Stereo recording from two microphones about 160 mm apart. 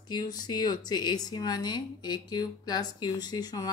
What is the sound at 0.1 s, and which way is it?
Speech, 25° left (ahead or behind).